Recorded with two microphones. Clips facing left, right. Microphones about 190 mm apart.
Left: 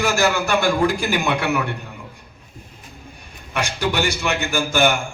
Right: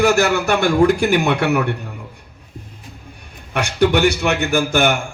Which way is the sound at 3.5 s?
60° right (ahead or behind).